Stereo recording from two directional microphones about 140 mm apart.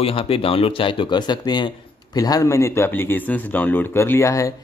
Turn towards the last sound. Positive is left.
turn(degrees=20)  # may be behind; listen again after turning